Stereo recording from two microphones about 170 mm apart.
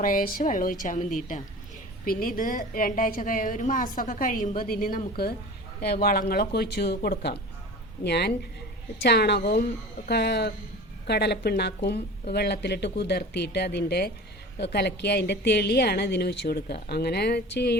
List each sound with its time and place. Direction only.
0.0 s a woman's voice: 55° left (ahead or behind); by 17.7 s 75° left (ahead or behind)